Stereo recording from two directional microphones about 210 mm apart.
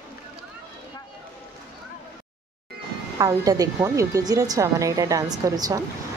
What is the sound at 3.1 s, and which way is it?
A woman's voice, 15° right (ahead or behind).